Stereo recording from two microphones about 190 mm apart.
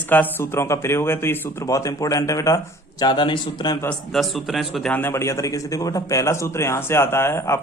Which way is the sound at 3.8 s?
5° left (ahead or behind).